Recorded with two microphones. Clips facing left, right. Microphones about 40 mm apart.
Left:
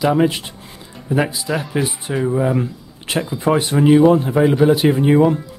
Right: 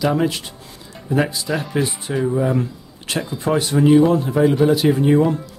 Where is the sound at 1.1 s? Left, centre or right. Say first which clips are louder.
Left 1 dB; centre.